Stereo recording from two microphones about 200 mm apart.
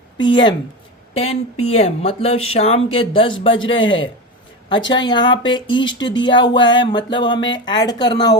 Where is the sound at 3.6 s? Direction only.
75° left (ahead or behind).